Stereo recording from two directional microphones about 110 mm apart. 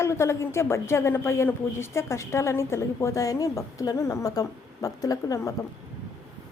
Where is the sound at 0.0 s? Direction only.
25° left (ahead or behind).